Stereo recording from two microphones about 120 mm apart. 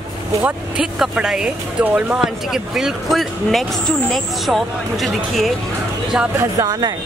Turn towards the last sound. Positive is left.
turn(degrees=-30)  # may be behind; listen again after turning